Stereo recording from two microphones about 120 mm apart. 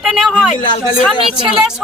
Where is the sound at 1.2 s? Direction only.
50° right (ahead or behind).